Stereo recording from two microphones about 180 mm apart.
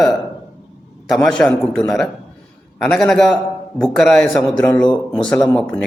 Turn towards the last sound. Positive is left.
turn(degrees=5)  # may be behind; listen again after turning